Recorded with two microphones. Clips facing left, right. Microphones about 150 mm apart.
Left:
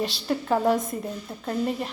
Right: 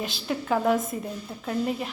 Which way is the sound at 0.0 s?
Centre (ahead or behind).